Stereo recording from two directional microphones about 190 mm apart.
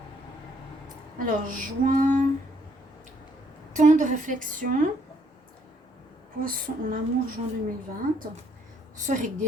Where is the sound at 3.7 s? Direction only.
40° right (ahead or behind).